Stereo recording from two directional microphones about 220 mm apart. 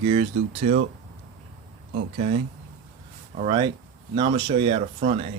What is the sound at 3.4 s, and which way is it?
Speech, 20° right (ahead or behind).